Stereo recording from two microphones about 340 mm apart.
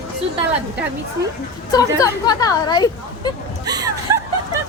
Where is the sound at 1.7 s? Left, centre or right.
Centre.